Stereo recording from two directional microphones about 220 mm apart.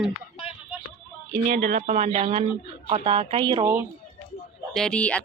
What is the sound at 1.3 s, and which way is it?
A woman's voice, 35° right (ahead or behind).